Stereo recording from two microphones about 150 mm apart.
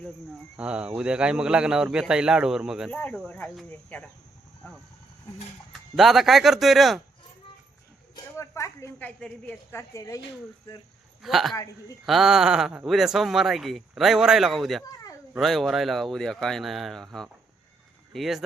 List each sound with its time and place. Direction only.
0.5 s speech: 5° right (ahead or behind)
2.9 s speech: 10° left (ahead or behind)
6.0 s speech: centre (ahead or behind)
8.1 s speech: 20° left (ahead or behind)
9.9 s speech: 20° left (ahead or behind)
11.2 s speech: centre (ahead or behind)